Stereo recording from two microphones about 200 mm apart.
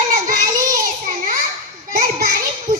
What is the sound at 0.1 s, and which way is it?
Child singing, 45° right (ahead or behind).